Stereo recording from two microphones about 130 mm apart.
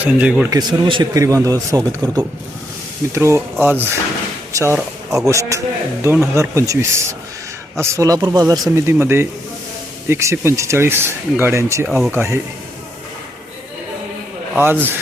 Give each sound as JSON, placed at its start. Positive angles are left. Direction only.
{"t": 0.0, "sound": "speech", "side_deg": -10}
{"t": 0.5, "sound": "speech", "side_deg": -35}
{"t": 1.1, "sound": "speech", "side_deg": -25}
{"t": 3.1, "sound": "speech", "side_deg": -20}
{"t": 11.9, "sound": "speech", "side_deg": 0}
{"t": 12.1, "sound": "speech", "side_deg": -20}
{"t": 14.6, "sound": "speech", "side_deg": -15}